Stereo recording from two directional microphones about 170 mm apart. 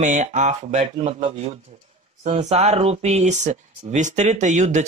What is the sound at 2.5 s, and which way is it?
Speech, 40° right (ahead or behind).